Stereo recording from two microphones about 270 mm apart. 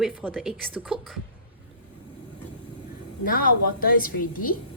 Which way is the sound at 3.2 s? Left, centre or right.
Left.